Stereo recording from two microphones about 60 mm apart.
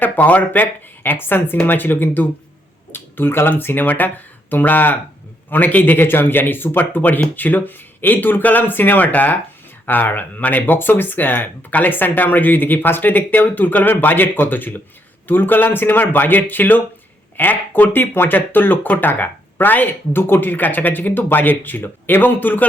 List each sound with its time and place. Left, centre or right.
0.0 s speech: left